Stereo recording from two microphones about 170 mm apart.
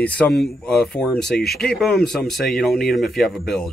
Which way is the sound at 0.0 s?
5° left (ahead or behind).